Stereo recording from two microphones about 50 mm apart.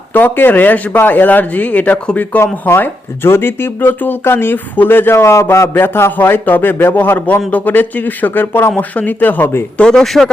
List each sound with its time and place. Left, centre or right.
0.1 s speech: left
2.4 s speech: left
5.1 s a man's voice: left
5.7 s speech: left
8.7 s speech: left
9.9 s speech: centre